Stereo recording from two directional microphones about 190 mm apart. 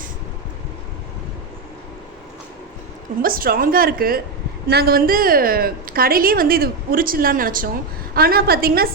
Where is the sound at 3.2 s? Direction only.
50° right (ahead or behind).